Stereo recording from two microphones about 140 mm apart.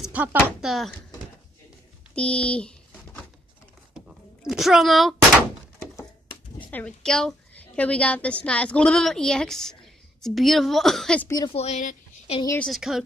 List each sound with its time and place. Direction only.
0.0 s a sound: 10° right (ahead or behind)
0.6 s a woman's voice: centre (ahead or behind)
2.1 s a sound: 5° left (ahead or behind)
4.1 s speech: centre (ahead or behind)
6.7 s a woman's voice: 5° left (ahead or behind)
11.2 s a woman's voice: 25° left (ahead or behind)
11.5 s speech: 55° left (ahead or behind)
12.5 s a woman's voice: centre (ahead or behind)